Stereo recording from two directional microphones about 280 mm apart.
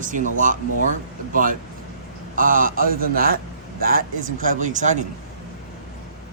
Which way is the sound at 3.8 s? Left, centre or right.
Right.